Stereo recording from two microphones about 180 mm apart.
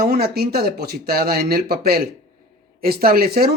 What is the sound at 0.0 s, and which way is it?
Speech, 60° right (ahead or behind).